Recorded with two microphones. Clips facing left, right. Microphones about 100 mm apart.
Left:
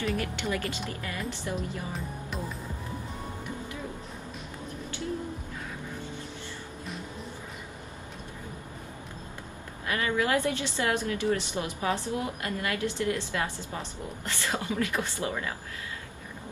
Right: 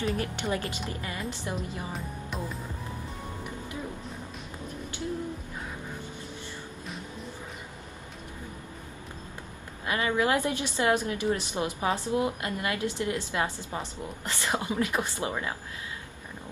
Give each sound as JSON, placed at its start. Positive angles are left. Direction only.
{"t": 0.0, "sound": "a woman's voice", "side_deg": -30}
{"t": 2.3, "sound": "music", "side_deg": 0}
{"t": 9.8, "sound": "a woman's voice", "side_deg": -25}